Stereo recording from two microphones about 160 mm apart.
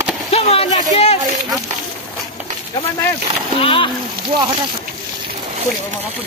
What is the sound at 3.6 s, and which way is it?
Speech, 35° left (ahead or behind).